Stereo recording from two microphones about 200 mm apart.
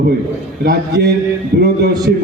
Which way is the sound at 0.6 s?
55° right (ahead or behind).